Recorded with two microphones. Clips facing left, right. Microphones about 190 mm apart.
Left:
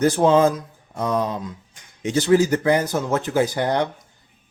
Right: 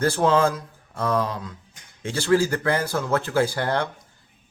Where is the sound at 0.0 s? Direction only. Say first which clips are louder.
Left 4 dB; 20° left (ahead or behind).